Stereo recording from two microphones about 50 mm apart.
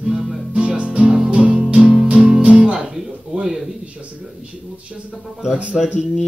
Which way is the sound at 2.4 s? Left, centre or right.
Right.